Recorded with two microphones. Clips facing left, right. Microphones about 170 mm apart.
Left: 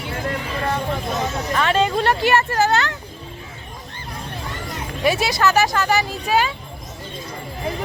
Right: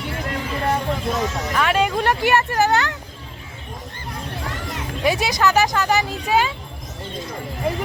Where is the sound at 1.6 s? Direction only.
10° right (ahead or behind).